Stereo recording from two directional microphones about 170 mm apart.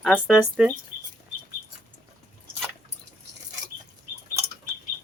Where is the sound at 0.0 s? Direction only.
Centre (ahead or behind).